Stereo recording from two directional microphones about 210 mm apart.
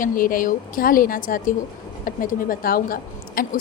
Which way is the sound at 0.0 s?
40° left (ahead or behind).